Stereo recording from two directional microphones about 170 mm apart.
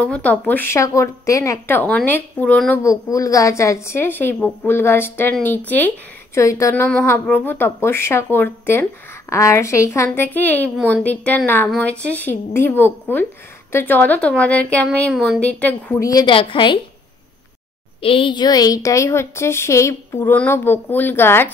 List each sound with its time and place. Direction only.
0.0 s a woman's voice: 10° left (ahead or behind)
2.8 s a woman's voice: 20° left (ahead or behind)
18.0 s a woman's voice: 30° left (ahead or behind); by 21.5 s 15° left (ahead or behind)